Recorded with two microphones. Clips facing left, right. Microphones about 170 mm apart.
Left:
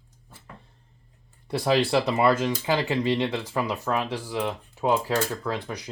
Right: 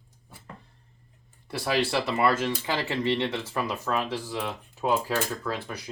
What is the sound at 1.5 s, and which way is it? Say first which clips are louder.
Speech: left 4 dB; 20° left (ahead or behind).